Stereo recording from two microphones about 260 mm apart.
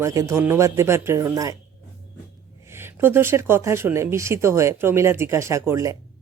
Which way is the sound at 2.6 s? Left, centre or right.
Centre.